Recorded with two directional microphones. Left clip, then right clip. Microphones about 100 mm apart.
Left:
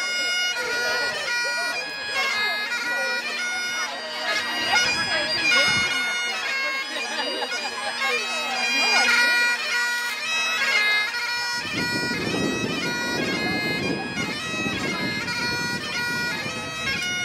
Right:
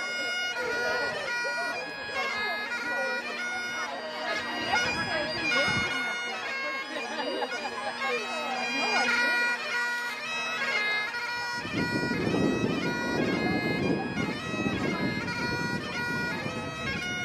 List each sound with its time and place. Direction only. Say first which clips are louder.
0.4 s bagpipes: left 5 dB; 15° left (ahead or behind)
2.1 s bagpipes: left 7 dB; 20° left (ahead or behind)
4.3 s bagpipes: left 7 dB; 20° left (ahead or behind)
8.6 s bagpipes: left 8 dB; 20° left (ahead or behind)
12.3 s bagpipes: left 2 dB; 15° left (ahead or behind)